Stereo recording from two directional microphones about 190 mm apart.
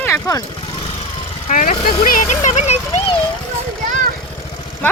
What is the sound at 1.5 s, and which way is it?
Speech, 45° left (ahead or behind).